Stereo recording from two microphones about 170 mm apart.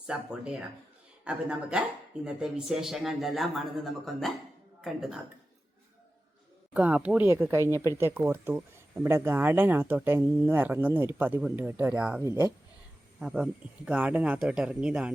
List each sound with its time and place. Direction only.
0.1 s a man's voice: 5° right (ahead or behind)
6.7 s speech: 10° right (ahead or behind)
13.1 s a man's voice: 5° right (ahead or behind)